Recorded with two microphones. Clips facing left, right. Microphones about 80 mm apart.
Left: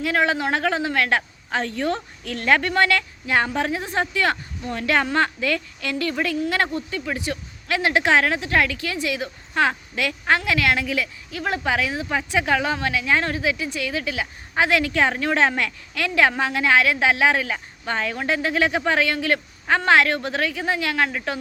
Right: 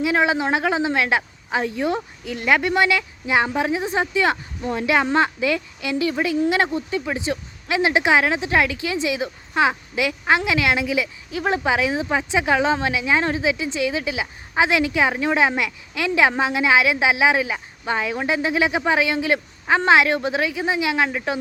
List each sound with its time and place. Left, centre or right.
0.0 s a woman's voice: centre